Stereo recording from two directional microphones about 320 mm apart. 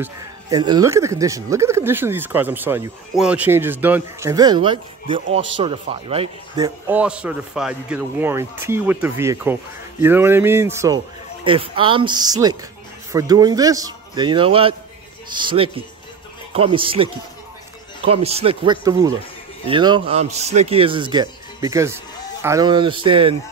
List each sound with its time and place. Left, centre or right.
0.0 s speech: centre